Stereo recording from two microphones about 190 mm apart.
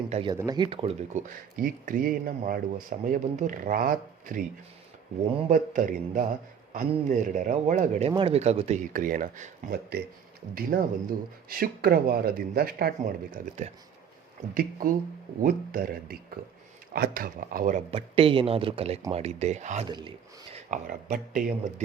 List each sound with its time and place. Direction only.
0.1 s speech: 25° right (ahead or behind)
1.5 s speech: 45° right (ahead or behind)
17.9 s speech: 30° right (ahead or behind)
19.9 s speech: 25° right (ahead or behind)
20.7 s speech: 50° right (ahead or behind)